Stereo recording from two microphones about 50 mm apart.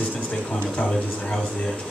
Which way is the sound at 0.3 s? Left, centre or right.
Centre.